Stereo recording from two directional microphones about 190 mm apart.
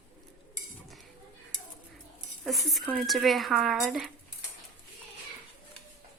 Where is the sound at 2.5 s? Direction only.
Centre (ahead or behind).